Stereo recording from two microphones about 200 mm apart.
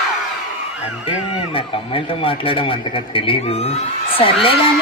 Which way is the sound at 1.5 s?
25° left (ahead or behind).